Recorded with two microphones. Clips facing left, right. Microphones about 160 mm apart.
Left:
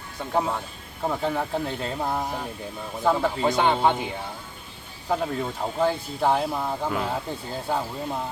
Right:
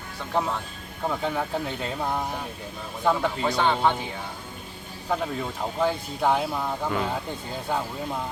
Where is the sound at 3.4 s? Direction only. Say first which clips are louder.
Left 2 dB; 20° left (ahead or behind).